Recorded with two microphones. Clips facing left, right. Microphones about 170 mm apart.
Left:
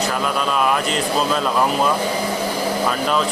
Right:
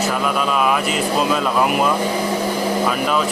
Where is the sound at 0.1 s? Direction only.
5° right (ahead or behind).